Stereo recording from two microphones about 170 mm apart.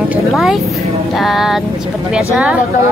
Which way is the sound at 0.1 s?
Centre (ahead or behind).